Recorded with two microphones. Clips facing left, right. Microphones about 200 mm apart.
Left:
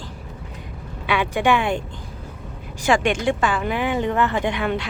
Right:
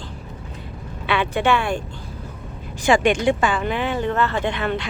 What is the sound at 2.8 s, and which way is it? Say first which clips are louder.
A woman's voice: right 2 dB; centre (ahead or behind).